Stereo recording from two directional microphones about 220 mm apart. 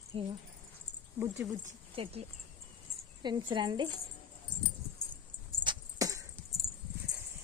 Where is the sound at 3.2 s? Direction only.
20° right (ahead or behind).